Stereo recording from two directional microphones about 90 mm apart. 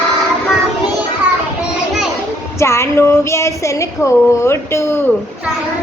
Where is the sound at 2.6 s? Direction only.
30° left (ahead or behind).